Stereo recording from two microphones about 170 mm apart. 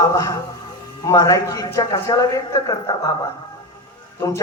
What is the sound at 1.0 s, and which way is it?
A man's voice, 20° left (ahead or behind).